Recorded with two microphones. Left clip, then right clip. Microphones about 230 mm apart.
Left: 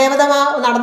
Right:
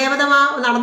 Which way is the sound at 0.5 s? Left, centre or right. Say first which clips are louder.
Left 3 dB; centre.